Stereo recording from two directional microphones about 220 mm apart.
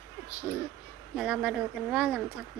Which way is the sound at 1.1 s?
5° right (ahead or behind).